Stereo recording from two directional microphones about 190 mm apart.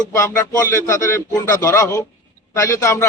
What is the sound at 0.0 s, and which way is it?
A man's voice, 15° left (ahead or behind).